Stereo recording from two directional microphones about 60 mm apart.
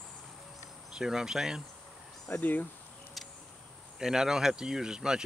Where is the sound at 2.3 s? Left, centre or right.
Left.